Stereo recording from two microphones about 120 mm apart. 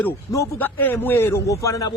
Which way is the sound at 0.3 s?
15° left (ahead or behind).